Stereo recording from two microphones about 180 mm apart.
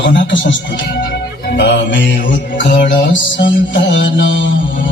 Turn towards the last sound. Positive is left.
turn(degrees=90)